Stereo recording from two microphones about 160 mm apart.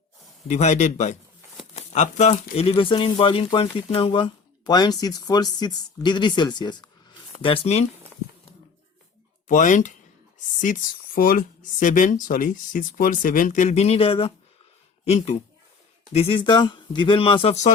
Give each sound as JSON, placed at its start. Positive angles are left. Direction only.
{"t": 0.4, "sound": "speech", "side_deg": 45}
{"t": 9.5, "sound": "speech", "side_deg": 50}